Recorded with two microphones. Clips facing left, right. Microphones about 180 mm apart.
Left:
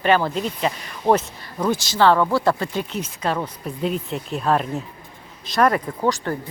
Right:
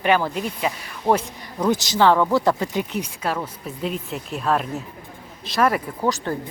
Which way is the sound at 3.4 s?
Centre (ahead or behind).